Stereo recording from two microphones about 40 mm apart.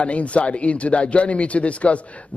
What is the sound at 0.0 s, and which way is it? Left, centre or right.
A man's voice, left.